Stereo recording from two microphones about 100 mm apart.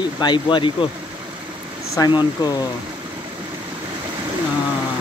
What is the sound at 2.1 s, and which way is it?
Speech, 45° left (ahead or behind).